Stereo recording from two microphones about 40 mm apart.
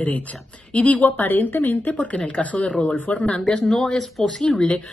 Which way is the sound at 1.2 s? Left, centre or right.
Left.